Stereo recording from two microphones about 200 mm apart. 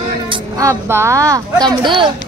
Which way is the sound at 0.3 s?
15° right (ahead or behind).